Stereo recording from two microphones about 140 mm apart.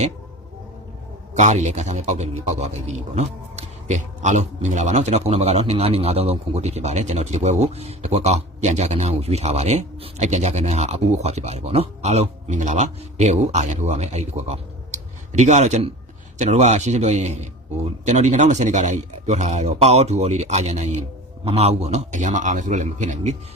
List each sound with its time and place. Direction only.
1.3 s a man's voice: 55° right (ahead or behind)